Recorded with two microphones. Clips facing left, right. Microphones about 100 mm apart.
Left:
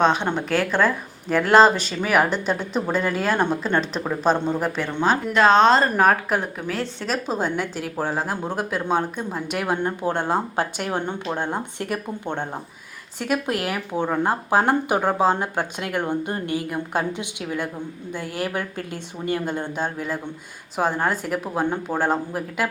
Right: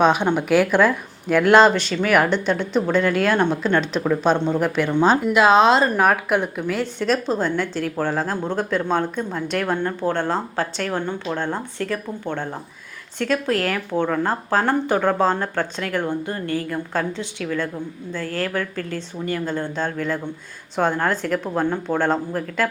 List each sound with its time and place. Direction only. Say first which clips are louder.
0.0 s a woman's voice: right 3 dB; 5° right (ahead or behind); by 22.7 s 10° left (ahead or behind)